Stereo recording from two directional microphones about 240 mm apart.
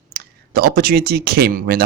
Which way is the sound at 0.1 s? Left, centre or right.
Right.